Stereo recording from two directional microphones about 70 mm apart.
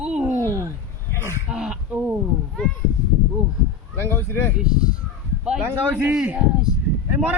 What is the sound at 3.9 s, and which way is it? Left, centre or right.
Speech, left.